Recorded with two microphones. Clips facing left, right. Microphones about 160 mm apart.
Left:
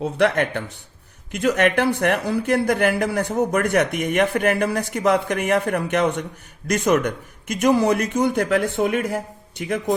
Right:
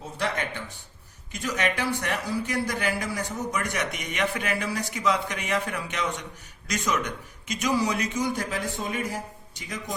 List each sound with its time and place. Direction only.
0.0 s speech: 65° left (ahead or behind)